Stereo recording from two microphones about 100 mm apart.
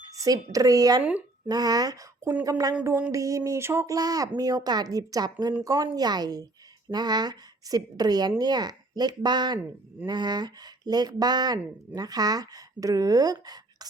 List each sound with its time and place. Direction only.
0.2 s a woman's voice: 35° right (ahead or behind)